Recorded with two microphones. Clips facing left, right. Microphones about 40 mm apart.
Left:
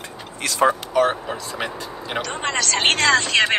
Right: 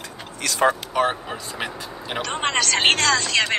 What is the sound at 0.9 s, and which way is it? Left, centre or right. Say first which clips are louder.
Speech: left 3 dB; centre.